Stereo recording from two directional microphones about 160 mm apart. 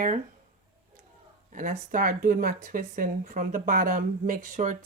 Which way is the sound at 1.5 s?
55° right (ahead or behind).